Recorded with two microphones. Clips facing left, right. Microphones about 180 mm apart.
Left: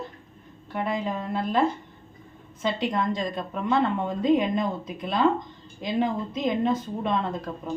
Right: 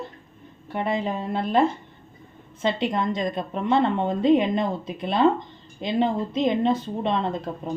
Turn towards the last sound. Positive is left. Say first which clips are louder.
# right 2 dB
turn(degrees=-25)  # may be behind; listen again after turning